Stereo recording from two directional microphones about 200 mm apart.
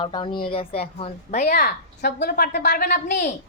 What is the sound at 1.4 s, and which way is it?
A woman's voice, 50° left (ahead or behind).